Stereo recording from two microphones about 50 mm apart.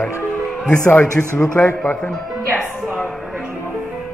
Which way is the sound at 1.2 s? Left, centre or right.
Left.